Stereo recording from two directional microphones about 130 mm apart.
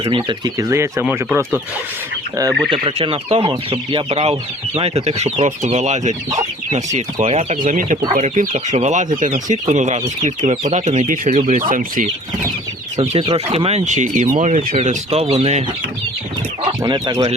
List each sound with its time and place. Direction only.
0.0 s speech: 40° right (ahead or behind); by 1.5 s 20° right (ahead or behind)
2.6 s speech: 40° right (ahead or behind)
7.6 s speech: 80° right
9.7 s speech: 65° right (ahead or behind); by 12.0 s 90° right
13.0 s speech: 45° right (ahead or behind)
16.8 s speech: 30° right (ahead or behind)